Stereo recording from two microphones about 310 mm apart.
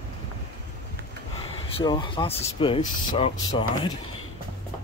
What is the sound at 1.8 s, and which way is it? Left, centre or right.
Speech, centre.